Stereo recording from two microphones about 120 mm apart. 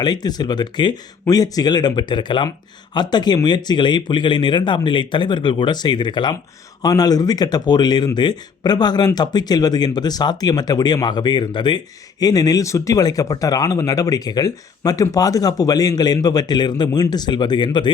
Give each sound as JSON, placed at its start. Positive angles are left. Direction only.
{"t": 0.0, "sound": "speech", "side_deg": 35}